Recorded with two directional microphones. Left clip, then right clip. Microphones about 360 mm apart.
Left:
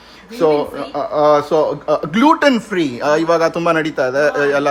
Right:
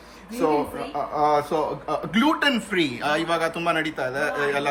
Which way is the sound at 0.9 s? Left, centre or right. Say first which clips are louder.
Left 8 dB; left.